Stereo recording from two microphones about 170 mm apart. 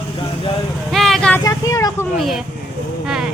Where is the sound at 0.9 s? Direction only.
Centre (ahead or behind).